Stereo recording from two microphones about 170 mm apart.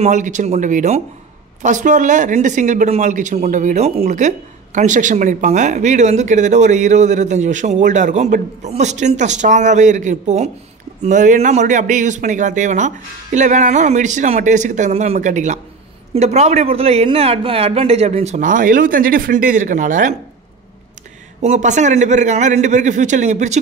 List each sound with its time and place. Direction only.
0.0 s speech: 45° right (ahead or behind)
21.4 s speech: 45° right (ahead or behind)